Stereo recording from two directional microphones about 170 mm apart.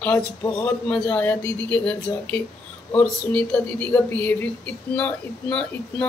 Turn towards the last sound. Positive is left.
turn(degrees=5)  # may be behind; listen again after turning